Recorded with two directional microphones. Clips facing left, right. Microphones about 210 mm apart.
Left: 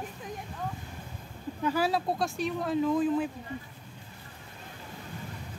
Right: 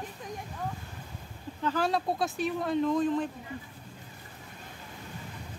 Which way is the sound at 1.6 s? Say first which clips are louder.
Left 1 dB; 5° left (ahead or behind).